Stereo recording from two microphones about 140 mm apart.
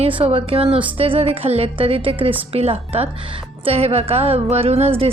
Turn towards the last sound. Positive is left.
turn(degrees=-45)  # may be behind; listen again after turning